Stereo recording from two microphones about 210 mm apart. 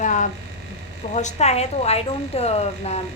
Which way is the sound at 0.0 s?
35° left (ahead or behind).